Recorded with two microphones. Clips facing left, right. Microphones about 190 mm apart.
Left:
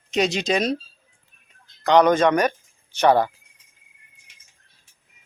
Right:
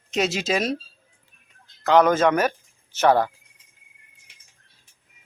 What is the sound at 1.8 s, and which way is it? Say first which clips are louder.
Speech: left 1 dB; 5° right (ahead or behind).